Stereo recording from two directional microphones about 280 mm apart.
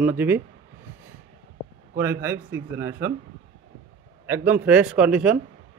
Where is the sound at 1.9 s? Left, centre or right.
Centre.